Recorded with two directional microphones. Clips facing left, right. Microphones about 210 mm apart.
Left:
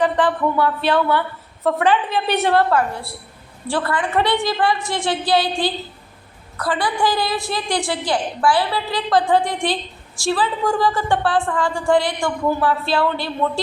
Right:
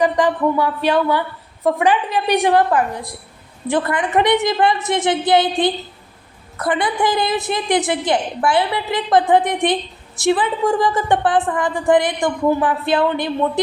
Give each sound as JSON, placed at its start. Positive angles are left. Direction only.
{"t": 0.0, "sound": "a woman's voice", "side_deg": -10}